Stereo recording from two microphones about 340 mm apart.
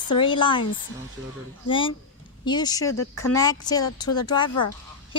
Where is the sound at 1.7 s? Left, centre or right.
Centre.